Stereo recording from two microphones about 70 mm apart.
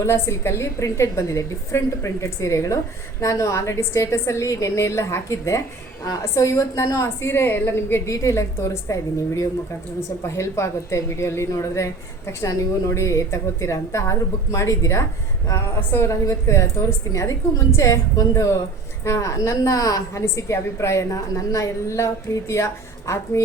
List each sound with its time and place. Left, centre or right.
0.0 s a woman's voice: left
7.2 s a woman's voice: left
8.0 s a woman's voice: left
15.8 s a woman's voice: left
16.0 s a woman's voice: left